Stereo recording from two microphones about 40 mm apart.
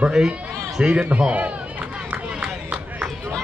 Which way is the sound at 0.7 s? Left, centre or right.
Centre.